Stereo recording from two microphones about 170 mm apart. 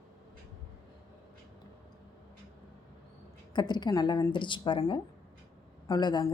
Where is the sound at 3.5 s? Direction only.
25° left (ahead or behind).